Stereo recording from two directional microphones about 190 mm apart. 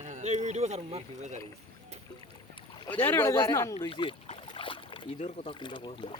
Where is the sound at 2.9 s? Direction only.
10° left (ahead or behind); by 5.5 s 35° left (ahead or behind).